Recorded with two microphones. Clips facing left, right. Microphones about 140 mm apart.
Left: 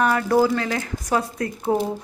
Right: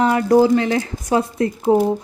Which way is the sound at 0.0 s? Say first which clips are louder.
Right 5 dB; 20° right (ahead or behind).